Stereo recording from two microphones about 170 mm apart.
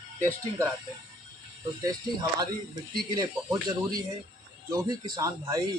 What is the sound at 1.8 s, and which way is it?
Speech, 20° right (ahead or behind).